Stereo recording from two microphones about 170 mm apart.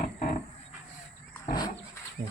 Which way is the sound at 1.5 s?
25° left (ahead or behind).